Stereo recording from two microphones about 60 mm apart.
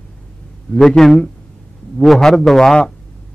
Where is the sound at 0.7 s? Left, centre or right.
Centre.